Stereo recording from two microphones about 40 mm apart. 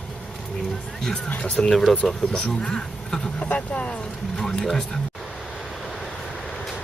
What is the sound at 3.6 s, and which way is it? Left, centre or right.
Speech, left.